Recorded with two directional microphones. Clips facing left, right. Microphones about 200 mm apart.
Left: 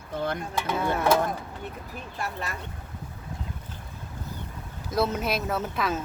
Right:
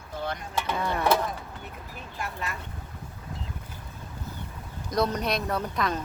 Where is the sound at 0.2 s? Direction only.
55° left (ahead or behind).